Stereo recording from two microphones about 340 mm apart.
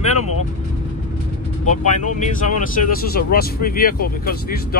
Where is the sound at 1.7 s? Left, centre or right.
Left.